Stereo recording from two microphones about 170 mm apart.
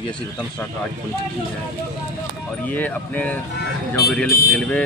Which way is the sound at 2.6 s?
10° left (ahead or behind).